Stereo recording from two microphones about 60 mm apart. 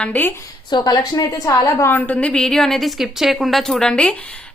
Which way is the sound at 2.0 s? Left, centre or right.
Left.